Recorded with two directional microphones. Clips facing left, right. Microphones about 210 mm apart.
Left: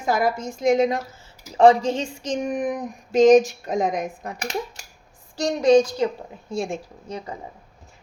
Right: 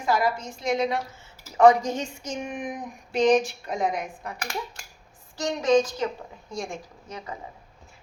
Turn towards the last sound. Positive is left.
turn(degrees=30)  # may be behind; listen again after turning